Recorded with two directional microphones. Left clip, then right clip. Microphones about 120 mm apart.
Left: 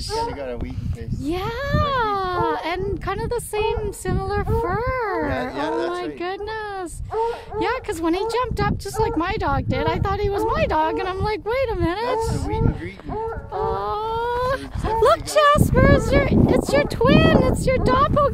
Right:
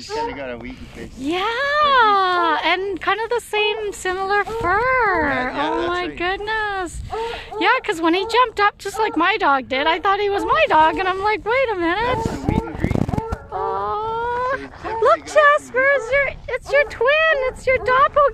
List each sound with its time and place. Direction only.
1.2 s speech: centre (ahead or behind)
5.3 s speech: 90° left
5.9 s speech: 15° left (ahead or behind)
11.1 s speech: 15° left (ahead or behind)
12.4 s speech: 50° left (ahead or behind); by 18.3 s 30° left (ahead or behind)